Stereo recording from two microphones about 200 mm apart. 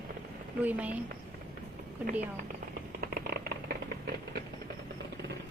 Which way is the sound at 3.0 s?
50° right (ahead or behind).